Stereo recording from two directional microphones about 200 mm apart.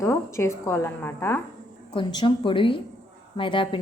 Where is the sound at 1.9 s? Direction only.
25° left (ahead or behind).